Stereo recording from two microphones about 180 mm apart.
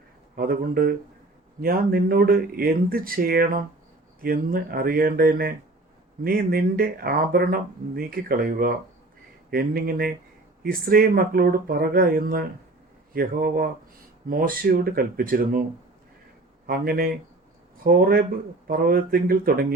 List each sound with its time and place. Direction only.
0.3 s speech: 55° right (ahead or behind)
16.6 s speech: 55° right (ahead or behind)